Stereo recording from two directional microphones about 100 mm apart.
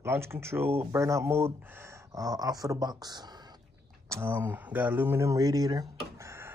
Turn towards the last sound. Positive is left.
turn(degrees=-40)  # may be behind; listen again after turning